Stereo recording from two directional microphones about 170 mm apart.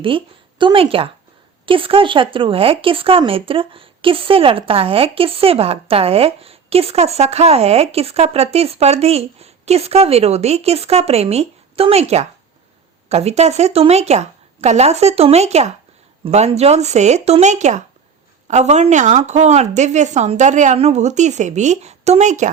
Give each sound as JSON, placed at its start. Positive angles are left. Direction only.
{"t": 0.6, "sound": "a woman's voice", "side_deg": -30}